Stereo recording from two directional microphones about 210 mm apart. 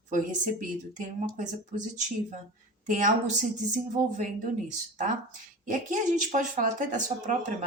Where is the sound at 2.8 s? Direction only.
40° right (ahead or behind).